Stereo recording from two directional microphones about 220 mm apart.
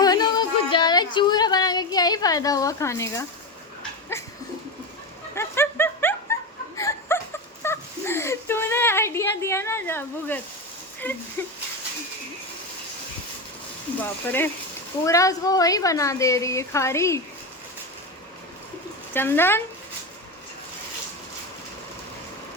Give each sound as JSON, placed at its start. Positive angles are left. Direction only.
{"t": 0.0, "sound": "music", "side_deg": 20}
{"t": 4.1, "sound": "speech", "side_deg": 10}
{"t": 5.3, "sound": "dog", "side_deg": 10}
{"t": 6.7, "sound": "a sound", "side_deg": 15}
{"t": 11.0, "sound": "speech", "side_deg": 10}
{"t": 14.0, "sound": "speech", "side_deg": 10}
{"t": 19.1, "sound": "speech", "side_deg": 10}